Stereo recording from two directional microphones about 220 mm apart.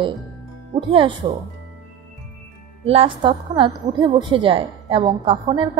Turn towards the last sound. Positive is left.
turn(degrees=-20)  # may be behind; listen again after turning